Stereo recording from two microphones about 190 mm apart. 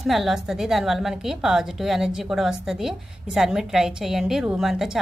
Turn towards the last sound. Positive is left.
turn(degrees=0)  # may be behind; listen again after turning